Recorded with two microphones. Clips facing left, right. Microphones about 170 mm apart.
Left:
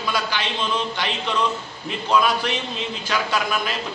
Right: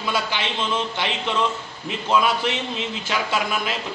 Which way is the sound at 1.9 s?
20° right (ahead or behind).